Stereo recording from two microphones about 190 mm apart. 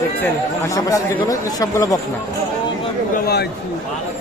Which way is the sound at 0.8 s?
20° left (ahead or behind).